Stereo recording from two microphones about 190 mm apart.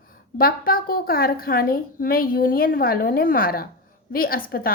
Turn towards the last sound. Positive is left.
turn(degrees=50)  # may be behind; listen again after turning